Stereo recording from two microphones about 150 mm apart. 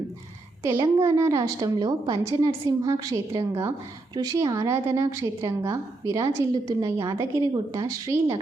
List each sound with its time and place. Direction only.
0.6 s a woman's voice: 20° right (ahead or behind)